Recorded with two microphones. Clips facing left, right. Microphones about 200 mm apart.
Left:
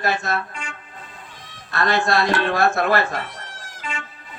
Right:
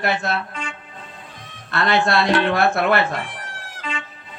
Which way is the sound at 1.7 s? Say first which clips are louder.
Right 1 dB; 65° right (ahead or behind).